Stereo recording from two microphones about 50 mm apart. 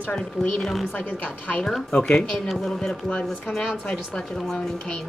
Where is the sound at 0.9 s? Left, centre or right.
Left.